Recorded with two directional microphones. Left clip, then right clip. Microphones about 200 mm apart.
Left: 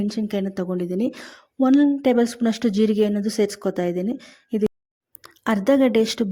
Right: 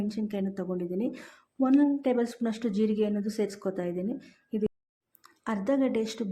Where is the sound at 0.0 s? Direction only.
40° left (ahead or behind).